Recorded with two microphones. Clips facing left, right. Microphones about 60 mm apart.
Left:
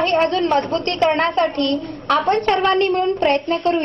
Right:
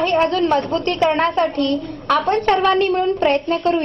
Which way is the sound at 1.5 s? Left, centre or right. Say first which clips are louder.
Right 1 dB; left.